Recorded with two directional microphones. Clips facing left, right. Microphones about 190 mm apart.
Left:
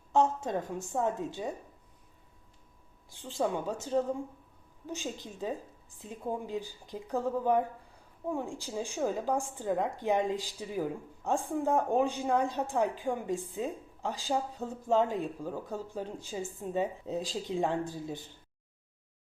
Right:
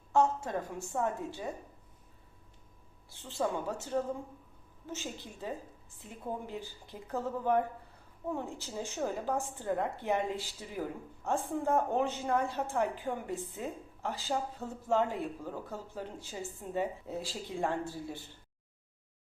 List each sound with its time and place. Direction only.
0.1 s a woman's voice: 20° left (ahead or behind)
3.1 s a woman's voice: 15° left (ahead or behind)